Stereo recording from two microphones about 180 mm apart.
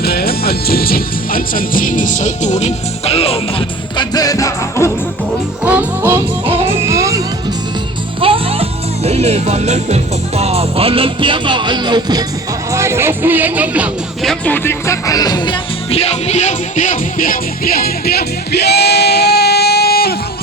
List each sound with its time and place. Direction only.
0.0 s speech: 60° left (ahead or behind); by 3.4 s 35° left (ahead or behind)
3.9 s music: 20° left (ahead or behind)
5.6 s music: 10° right (ahead or behind)
6.4 s music: 35° right (ahead or behind)
6.8 s music: 15° right (ahead or behind)
8.2 s music: 30° right (ahead or behind)
9.0 s speech: 35° right (ahead or behind); by 20.1 s 60° left (ahead or behind)